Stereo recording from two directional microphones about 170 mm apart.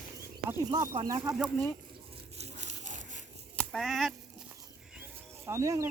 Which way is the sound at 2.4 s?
45° right (ahead or behind).